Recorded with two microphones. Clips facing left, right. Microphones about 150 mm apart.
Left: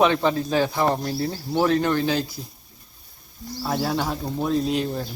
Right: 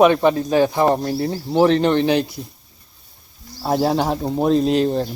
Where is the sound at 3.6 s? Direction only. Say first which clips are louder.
Right 6 dB; 40° right (ahead or behind).